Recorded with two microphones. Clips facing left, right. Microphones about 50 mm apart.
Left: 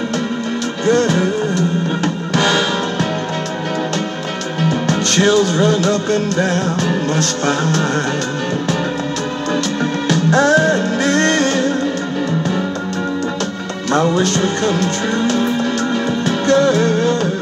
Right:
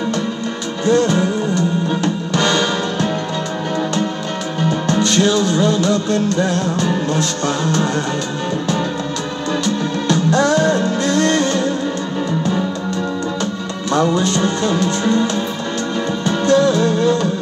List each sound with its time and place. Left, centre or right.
0.8 s music: left
2.3 s music: centre
4.6 s music: centre
5.8 s music: left
10.3 s music: left
16.4 s music: left